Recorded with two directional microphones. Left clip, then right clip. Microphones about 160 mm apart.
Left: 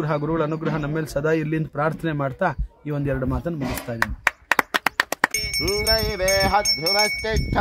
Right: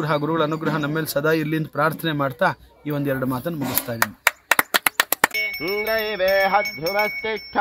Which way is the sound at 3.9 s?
80° right.